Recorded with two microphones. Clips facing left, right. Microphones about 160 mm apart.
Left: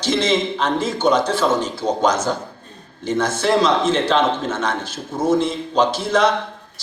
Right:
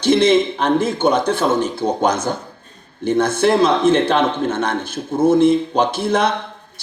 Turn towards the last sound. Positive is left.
turn(degrees=-55)  # may be behind; listen again after turning